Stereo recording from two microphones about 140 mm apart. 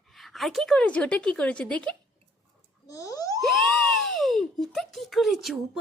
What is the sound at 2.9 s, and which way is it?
Plop, 25° left (ahead or behind).